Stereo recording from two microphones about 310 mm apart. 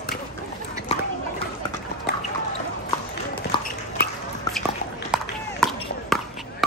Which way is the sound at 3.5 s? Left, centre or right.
Centre.